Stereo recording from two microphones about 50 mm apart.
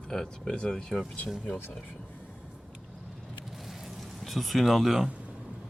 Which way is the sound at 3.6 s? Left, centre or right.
Centre.